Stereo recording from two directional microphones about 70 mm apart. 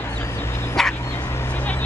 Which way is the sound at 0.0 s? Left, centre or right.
Left.